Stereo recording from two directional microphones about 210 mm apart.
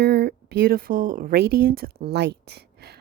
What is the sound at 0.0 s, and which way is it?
Speech, 50° right (ahead or behind).